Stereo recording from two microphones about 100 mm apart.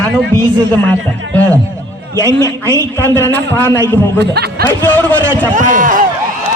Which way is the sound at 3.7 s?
20° left (ahead or behind).